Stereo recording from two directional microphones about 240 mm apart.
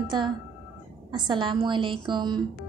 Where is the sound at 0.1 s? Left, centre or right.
Centre.